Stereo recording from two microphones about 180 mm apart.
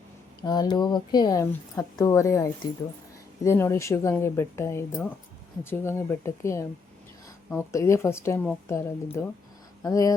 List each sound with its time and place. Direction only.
0.4 s speech: 20° left (ahead or behind)
7.7 s speech: 15° left (ahead or behind)